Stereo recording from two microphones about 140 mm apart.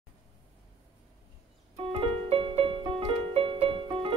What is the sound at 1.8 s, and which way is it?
Music, 40° right (ahead or behind).